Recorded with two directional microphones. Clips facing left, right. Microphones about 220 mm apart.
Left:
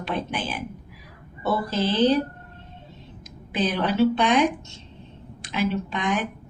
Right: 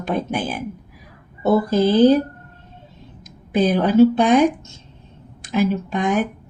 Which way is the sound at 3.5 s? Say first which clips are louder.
Right 8 dB; 50° right (ahead or behind).